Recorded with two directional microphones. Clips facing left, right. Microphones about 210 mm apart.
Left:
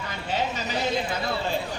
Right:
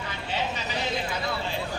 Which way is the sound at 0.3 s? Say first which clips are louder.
Left 3 dB; 45° left (ahead or behind).